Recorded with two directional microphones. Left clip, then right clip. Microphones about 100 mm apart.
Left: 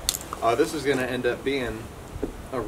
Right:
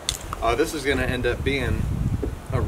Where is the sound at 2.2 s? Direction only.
25° left (ahead or behind).